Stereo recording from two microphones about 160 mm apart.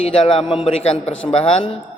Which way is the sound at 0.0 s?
40° left (ahead or behind).